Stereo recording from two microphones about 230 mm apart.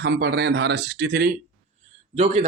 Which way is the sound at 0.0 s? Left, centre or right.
Right.